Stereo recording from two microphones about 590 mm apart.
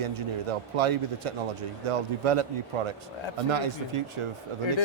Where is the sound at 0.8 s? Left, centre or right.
Right.